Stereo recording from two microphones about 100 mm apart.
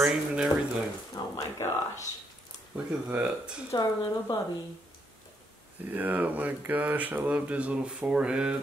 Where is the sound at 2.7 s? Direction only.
10° right (ahead or behind).